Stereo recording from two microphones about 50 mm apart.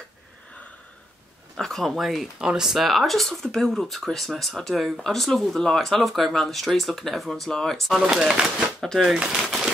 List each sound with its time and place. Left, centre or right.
1.6 s speech: centre
2.0 s speech: centre
2.3 s speech: centre
2.9 s speech: centre
7.9 s speech: centre
9.3 s speech: centre